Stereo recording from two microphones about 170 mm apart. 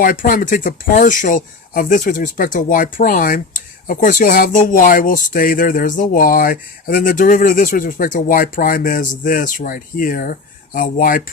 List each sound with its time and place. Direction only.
0.0 s speech: 55° left (ahead or behind)